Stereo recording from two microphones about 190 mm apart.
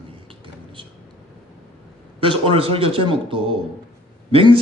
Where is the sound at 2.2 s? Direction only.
30° right (ahead or behind).